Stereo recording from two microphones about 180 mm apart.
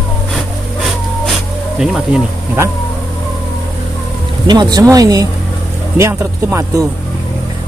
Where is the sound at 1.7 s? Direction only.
5° right (ahead or behind).